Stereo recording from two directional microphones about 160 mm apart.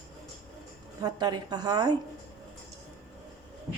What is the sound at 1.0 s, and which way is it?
Speech, 25° right (ahead or behind).